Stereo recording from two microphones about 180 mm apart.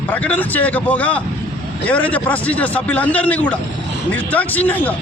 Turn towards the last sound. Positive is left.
turn(degrees=10)  # may be behind; listen again after turning